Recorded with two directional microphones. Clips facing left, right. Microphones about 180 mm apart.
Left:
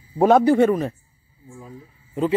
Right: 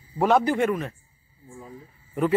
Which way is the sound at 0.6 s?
35° left (ahead or behind).